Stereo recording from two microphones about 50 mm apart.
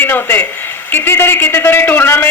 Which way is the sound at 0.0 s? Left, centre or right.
Left.